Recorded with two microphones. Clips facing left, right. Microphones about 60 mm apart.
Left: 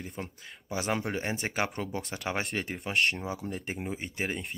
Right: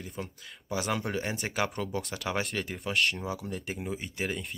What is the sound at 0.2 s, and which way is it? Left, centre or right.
Speech, left.